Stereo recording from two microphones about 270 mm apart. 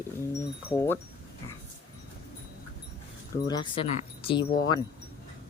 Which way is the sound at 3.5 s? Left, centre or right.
Centre.